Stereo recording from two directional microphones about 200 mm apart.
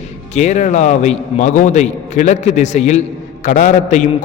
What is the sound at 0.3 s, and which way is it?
A man's voice, 35° left (ahead or behind).